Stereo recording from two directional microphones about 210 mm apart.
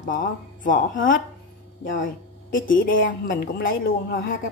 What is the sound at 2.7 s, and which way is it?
Music, 40° left (ahead or behind).